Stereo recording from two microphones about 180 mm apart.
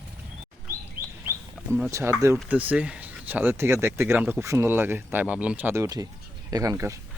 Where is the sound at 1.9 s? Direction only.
15° right (ahead or behind).